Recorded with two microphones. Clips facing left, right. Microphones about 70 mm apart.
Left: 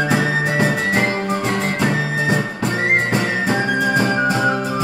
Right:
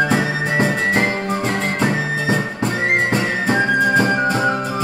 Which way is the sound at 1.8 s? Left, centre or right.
Right.